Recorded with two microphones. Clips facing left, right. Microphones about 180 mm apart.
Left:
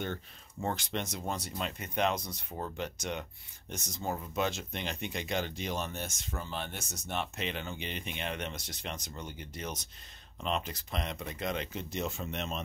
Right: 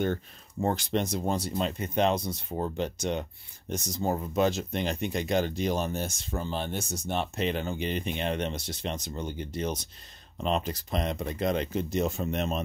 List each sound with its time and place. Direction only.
0.0 s speech: 40° right (ahead or behind)